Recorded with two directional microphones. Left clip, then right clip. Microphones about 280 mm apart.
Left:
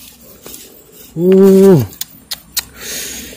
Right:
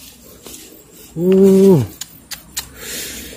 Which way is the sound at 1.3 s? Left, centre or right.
Left.